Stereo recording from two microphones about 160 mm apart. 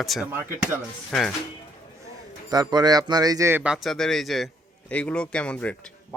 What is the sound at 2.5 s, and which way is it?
Speech, 25° right (ahead or behind).